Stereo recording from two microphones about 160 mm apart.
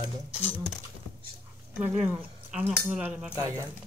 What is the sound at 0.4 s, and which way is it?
Speech, 10° left (ahead or behind).